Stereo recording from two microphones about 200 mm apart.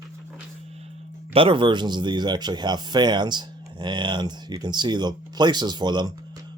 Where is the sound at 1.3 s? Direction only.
25° right (ahead or behind).